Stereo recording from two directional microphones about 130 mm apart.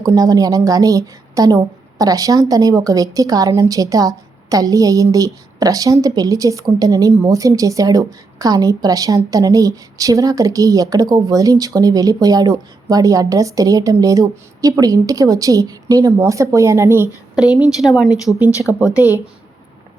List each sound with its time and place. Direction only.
0.0 s a woman's voice: 25° right (ahead or behind)
17.3 s speech: 5° right (ahead or behind)